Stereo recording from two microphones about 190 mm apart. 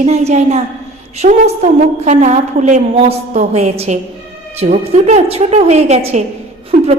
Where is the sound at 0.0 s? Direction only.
35° right (ahead or behind).